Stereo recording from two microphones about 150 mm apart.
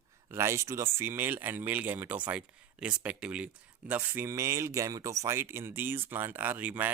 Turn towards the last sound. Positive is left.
turn(degrees=-10)  # may be behind; listen again after turning